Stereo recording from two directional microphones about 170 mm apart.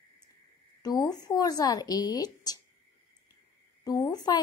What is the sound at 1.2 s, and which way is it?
A woman's voice, 20° left (ahead or behind).